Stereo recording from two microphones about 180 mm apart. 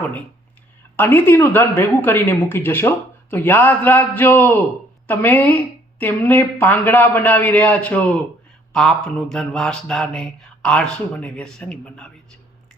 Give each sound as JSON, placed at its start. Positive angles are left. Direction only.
{"t": 0.9, "sound": "a woman's voice", "side_deg": 10}
{"t": 8.7, "sound": "mantra", "side_deg": 5}